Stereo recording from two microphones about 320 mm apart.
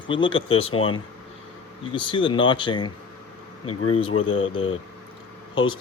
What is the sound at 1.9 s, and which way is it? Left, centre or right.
Speech, centre.